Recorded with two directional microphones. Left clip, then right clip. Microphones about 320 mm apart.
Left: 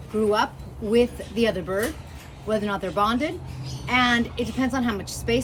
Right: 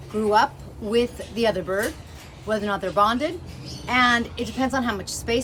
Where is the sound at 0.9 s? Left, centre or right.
Centre.